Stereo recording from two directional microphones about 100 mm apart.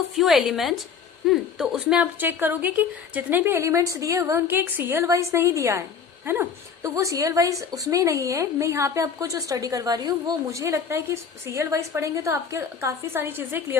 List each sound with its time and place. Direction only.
0.2 s a woman's voice: 5° right (ahead or behind); by 4.4 s 30° right (ahead or behind)
4.4 s a woman's voice: 20° right (ahead or behind)